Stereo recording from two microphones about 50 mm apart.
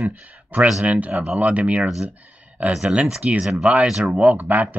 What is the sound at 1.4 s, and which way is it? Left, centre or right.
Speech, right.